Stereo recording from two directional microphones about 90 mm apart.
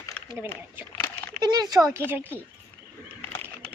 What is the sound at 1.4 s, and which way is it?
Speech, 50° right (ahead or behind).